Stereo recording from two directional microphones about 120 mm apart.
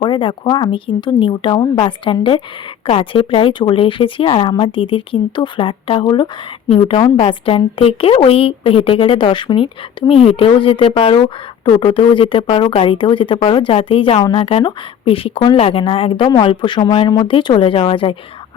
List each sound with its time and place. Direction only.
0.0 s speech: 40° left (ahead or behind)
6.7 s speech: 50° left (ahead or behind)
10.1 s speech: 55° left (ahead or behind)